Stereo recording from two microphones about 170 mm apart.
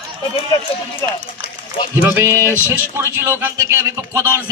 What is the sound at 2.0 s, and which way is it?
A man's voice, 15° right (ahead or behind).